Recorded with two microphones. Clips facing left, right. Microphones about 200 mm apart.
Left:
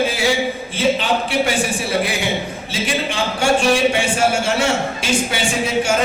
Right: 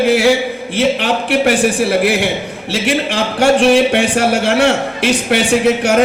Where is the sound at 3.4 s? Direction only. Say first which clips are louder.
Right 6 dB; 65° right (ahead or behind).